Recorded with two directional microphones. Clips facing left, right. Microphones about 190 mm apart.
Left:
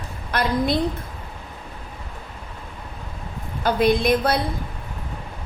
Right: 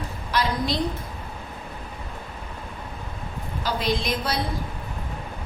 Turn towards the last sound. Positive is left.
turn(degrees=55)  # may be behind; listen again after turning